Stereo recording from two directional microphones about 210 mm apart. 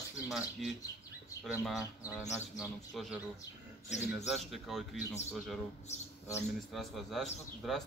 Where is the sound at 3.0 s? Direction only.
Centre (ahead or behind).